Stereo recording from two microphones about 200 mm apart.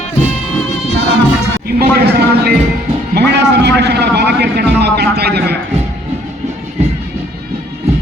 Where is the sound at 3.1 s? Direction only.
55° right (ahead or behind).